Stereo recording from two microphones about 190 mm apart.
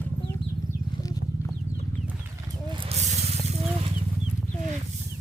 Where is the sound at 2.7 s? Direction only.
30° right (ahead or behind).